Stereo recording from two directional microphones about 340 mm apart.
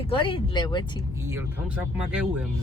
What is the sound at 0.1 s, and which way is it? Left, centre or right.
Speech, centre.